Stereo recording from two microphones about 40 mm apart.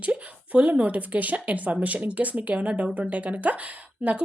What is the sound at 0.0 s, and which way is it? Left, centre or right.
A woman's voice, right.